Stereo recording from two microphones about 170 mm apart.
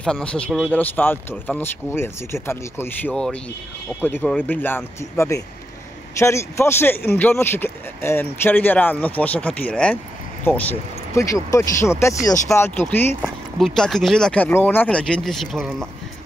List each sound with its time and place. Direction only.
0.0 s speech: 5° left (ahead or behind)